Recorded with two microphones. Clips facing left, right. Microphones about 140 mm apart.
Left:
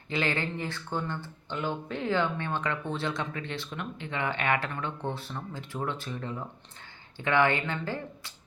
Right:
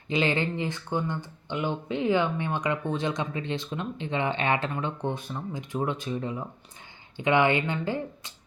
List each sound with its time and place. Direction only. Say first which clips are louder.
0.1 s speech: right 4 dB; 20° right (ahead or behind)